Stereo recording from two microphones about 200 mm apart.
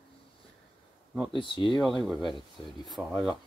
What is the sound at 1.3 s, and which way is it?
Speech, 25° left (ahead or behind).